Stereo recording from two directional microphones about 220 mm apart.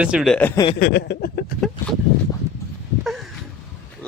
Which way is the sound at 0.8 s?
50° left (ahead or behind).